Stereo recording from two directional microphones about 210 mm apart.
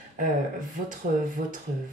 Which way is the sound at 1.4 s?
40° right (ahead or behind).